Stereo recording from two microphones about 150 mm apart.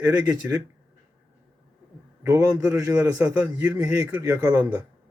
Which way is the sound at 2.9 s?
10° right (ahead or behind).